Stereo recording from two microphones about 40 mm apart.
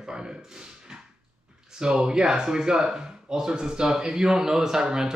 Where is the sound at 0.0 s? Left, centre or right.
Centre.